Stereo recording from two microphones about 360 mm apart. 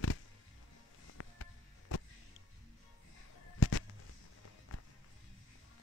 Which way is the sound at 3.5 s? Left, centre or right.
Left.